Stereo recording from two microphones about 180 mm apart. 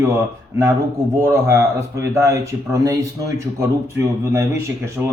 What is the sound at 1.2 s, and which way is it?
Speech, 15° right (ahead or behind).